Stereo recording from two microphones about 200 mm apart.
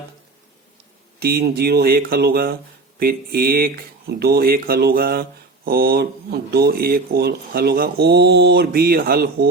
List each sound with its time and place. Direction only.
1.2 s speech: 50° right (ahead or behind)